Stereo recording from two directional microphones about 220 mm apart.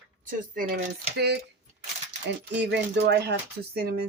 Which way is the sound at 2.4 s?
50° right (ahead or behind).